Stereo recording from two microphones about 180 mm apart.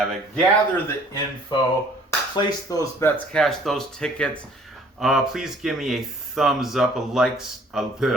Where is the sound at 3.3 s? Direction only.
Centre (ahead or behind).